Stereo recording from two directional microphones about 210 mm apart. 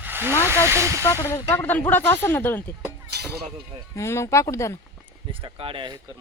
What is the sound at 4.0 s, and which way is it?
Speech, 15° left (ahead or behind).